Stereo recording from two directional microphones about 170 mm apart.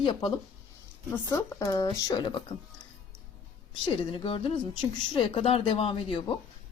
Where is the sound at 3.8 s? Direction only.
30° left (ahead or behind).